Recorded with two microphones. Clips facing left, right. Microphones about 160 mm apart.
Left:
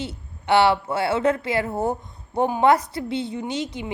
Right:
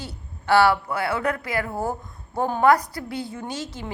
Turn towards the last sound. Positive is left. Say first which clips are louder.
# left 4 dB
turn(degrees=20)  # may be behind; listen again after turning